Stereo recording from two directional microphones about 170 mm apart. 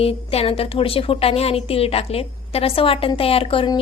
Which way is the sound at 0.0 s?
35° left (ahead or behind).